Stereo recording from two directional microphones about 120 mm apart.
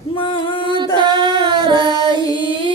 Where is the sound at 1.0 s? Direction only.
40° right (ahead or behind).